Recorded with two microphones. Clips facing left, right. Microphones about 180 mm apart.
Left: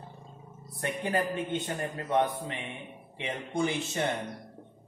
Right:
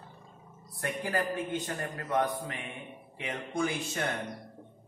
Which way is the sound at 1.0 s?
25° left (ahead or behind).